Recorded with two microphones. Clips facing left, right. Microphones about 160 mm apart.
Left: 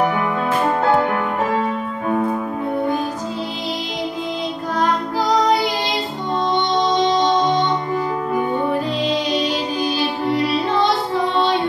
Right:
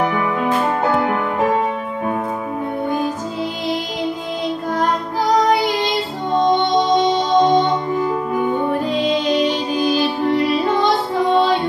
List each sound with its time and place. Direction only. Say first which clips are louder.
6.4 s music: right 3 dB; 40° right (ahead or behind)